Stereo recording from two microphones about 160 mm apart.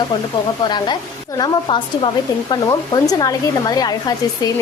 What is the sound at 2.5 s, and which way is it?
Speech, 25° left (ahead or behind).